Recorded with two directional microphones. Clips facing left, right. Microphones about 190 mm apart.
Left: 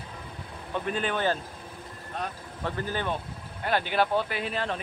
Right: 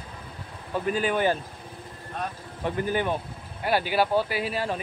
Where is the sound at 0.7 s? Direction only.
5° right (ahead or behind).